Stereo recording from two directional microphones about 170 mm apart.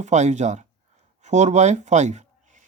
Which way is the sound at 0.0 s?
45° right (ahead or behind).